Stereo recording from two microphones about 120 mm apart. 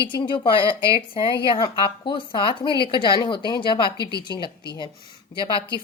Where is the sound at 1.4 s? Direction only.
40° left (ahead or behind).